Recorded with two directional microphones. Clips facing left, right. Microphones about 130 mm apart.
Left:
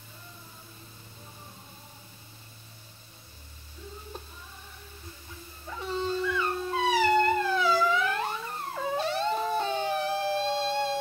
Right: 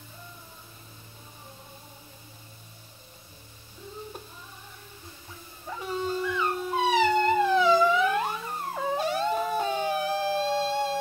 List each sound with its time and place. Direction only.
5.9 s theremin: 15° right (ahead or behind)